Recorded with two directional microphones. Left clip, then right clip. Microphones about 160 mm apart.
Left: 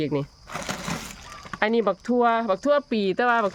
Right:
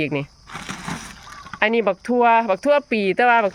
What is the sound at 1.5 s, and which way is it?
Speech, 5° right (ahead or behind).